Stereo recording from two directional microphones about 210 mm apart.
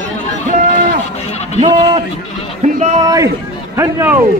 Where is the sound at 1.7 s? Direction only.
20° right (ahead or behind).